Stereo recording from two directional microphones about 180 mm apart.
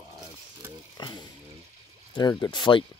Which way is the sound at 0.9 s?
25° left (ahead or behind).